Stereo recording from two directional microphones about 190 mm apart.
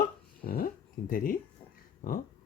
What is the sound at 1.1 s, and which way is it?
Speech, 45° left (ahead or behind).